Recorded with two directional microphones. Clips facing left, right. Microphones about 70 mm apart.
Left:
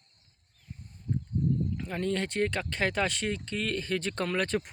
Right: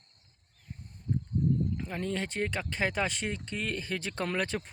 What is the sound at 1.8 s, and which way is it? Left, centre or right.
Speech, centre.